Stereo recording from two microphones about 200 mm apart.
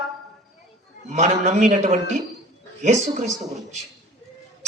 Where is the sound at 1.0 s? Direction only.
35° right (ahead or behind).